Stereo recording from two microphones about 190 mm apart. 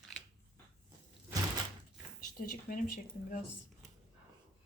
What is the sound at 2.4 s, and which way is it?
Speech, 45° left (ahead or behind).